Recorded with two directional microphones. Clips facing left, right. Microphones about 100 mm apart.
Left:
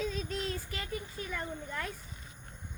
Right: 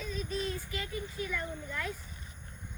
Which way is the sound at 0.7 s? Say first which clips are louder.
Right 1 dB; 40° left (ahead or behind).